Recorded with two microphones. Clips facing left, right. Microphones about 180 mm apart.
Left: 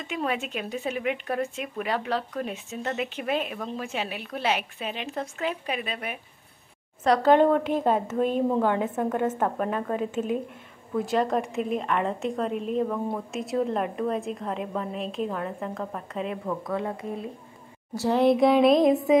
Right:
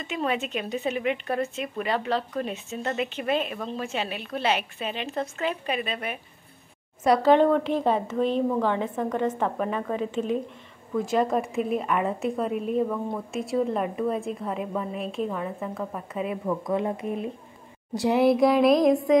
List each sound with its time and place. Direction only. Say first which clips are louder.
0.0 s a woman's voice: right 1 dB; 10° left (ahead or behind)
7.3 s a woman's voice: even; 5° left (ahead or behind)
16.6 s a woman's voice: right 3 dB; 20° right (ahead or behind); by 19.1 s 5° left (ahead or behind)